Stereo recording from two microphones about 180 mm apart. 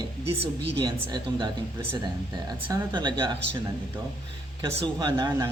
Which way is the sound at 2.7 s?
25° right (ahead or behind).